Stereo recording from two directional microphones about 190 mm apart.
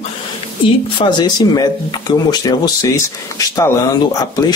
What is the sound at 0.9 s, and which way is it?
Speech, 25° left (ahead or behind).